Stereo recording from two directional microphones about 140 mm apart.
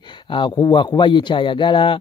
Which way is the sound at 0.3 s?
30° left (ahead or behind).